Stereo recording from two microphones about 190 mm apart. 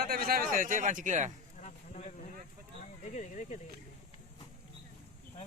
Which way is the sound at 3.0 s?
40° left (ahead or behind).